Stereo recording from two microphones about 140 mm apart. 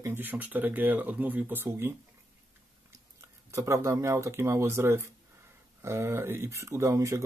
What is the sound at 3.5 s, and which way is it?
Speech, 20° right (ahead or behind).